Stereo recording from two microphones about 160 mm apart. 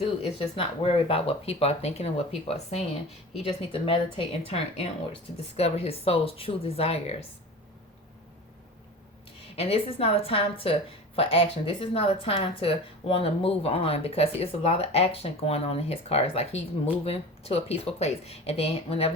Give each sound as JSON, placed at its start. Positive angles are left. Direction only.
{"t": 0.0, "sound": "a woman's voice", "side_deg": 35}
{"t": 9.6, "sound": "a woman's voice", "side_deg": 40}